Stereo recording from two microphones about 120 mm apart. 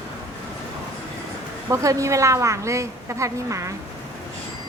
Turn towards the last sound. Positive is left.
turn(degrees=-25)  # may be behind; listen again after turning